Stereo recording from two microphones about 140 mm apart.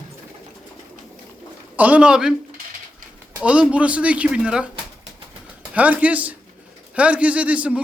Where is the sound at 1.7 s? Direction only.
10° right (ahead or behind).